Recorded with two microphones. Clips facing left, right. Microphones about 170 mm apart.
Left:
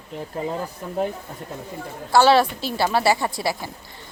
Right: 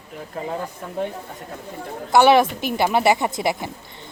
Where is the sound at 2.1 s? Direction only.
20° right (ahead or behind).